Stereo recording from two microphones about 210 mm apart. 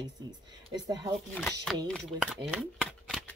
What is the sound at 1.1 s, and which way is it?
Speech, 5° left (ahead or behind).